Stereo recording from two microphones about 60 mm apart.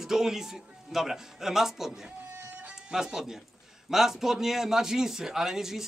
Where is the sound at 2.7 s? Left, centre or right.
Centre.